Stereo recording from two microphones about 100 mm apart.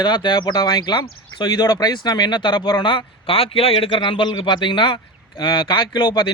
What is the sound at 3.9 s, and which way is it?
A man's voice, 55° left (ahead or behind).